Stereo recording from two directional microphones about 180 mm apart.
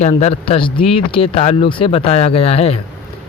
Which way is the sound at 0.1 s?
35° left (ahead or behind).